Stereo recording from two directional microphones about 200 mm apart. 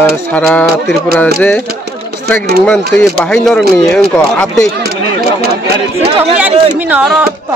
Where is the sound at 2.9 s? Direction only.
5° left (ahead or behind).